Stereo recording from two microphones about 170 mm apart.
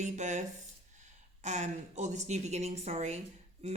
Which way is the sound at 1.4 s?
45° right (ahead or behind).